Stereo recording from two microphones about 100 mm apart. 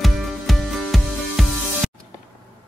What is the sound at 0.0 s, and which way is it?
Music, centre (ahead or behind).